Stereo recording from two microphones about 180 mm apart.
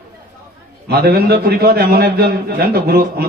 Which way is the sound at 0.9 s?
60° right (ahead or behind).